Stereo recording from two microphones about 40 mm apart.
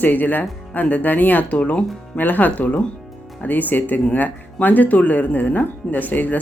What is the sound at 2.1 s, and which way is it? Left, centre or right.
Speech, left.